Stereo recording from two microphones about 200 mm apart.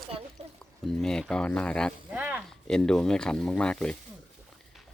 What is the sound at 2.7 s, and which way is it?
Speech, 5° left (ahead or behind).